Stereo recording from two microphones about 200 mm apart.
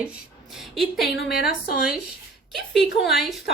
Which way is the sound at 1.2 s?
55° left (ahead or behind).